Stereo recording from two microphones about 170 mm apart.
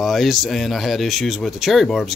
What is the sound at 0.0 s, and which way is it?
Speech, centre (ahead or behind).